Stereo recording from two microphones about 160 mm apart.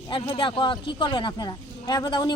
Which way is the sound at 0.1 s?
30° left (ahead or behind).